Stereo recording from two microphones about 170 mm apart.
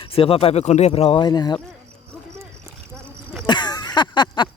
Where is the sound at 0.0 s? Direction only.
35° left (ahead or behind).